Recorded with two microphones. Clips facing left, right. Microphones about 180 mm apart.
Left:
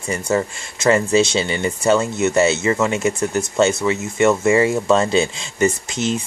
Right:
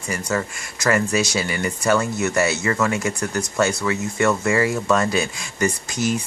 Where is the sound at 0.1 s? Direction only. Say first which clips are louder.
Left 5 dB; 25° left (ahead or behind).